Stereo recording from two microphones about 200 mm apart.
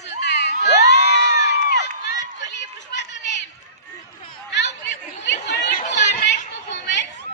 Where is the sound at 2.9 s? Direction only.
60° left (ahead or behind).